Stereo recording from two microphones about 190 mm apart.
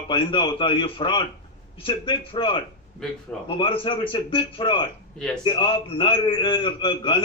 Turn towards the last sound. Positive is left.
turn(degrees=25)  # may be behind; listen again after turning